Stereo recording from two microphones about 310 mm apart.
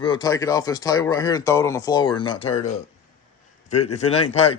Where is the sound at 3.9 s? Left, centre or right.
Left.